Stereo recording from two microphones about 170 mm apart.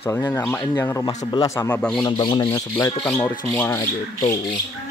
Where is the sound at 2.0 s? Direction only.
25° left (ahead or behind).